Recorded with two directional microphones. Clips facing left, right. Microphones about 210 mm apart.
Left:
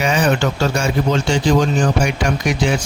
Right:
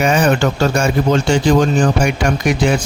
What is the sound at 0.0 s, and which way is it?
Speech, 50° right (ahead or behind).